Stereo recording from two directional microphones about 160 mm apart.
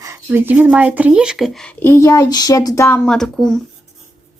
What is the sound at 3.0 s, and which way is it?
Speech, 5° left (ahead or behind).